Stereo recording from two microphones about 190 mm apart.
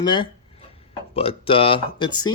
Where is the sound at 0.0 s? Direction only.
25° left (ahead or behind).